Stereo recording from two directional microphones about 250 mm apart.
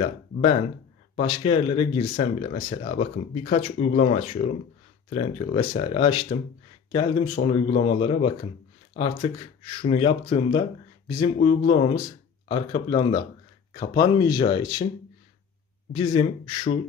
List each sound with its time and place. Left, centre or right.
0.0 s speech: left
15.9 s speech: centre